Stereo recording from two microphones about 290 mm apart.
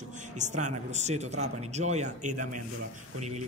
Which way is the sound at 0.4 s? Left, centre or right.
Right.